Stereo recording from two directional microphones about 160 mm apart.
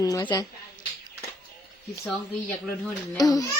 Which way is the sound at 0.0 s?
20° left (ahead or behind).